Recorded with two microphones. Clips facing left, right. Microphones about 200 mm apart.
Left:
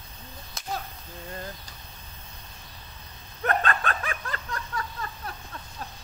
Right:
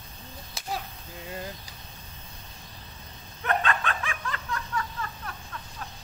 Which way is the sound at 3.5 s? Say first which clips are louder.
Left 1 dB; 40° left (ahead or behind).